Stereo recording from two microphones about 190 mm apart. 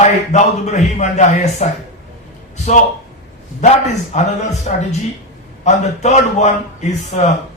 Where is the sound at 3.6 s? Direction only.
40° left (ahead or behind).